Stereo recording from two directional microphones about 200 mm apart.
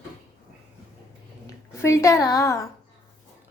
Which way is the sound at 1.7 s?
15° left (ahead or behind).